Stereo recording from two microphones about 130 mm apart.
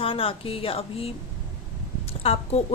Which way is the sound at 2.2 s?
50° left (ahead or behind).